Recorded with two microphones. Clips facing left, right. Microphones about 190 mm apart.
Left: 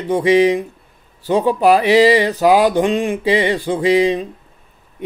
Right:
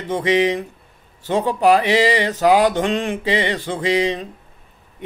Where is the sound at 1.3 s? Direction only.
15° left (ahead or behind).